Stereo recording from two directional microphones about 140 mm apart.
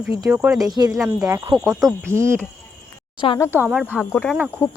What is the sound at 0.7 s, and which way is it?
Speech, 30° right (ahead or behind).